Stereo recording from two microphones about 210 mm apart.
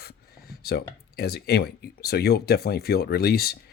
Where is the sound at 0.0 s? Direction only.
45° left (ahead or behind).